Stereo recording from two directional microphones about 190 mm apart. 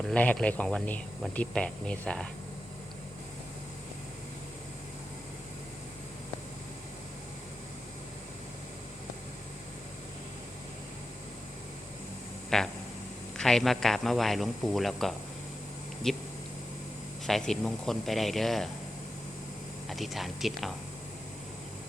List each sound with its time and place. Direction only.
0.0 s speech: 5° left (ahead or behind)
12.5 s speech: 5° left (ahead or behind)
17.2 s speech: centre (ahead or behind)
19.9 s speech: centre (ahead or behind)